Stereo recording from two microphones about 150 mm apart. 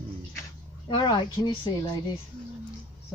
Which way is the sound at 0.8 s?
30° left (ahead or behind).